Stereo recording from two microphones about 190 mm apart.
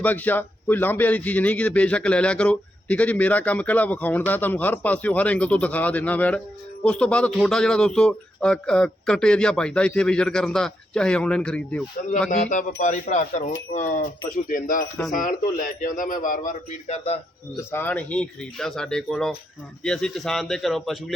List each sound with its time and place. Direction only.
0.0 s a man's voice: 10° left (ahead or behind)
12.5 s a man's voice: 40° left (ahead or behind)
17.7 s a man's voice: 10° left (ahead or behind)